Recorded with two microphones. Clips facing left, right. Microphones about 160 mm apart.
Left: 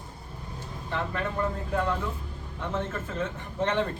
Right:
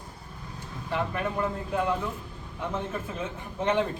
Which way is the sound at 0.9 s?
15° right (ahead or behind).